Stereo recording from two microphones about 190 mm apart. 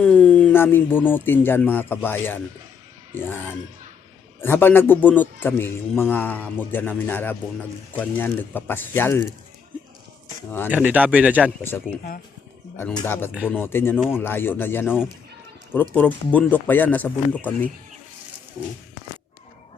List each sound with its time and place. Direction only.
0.0 s a man's voice: 5° left (ahead or behind)
10.7 s a man's voice: 5° right (ahead or behind)
12.9 s a man's voice: 15° left (ahead or behind)
13.9 s speech: 5° right (ahead or behind)
14.2 s a man's voice: 10° left (ahead or behind)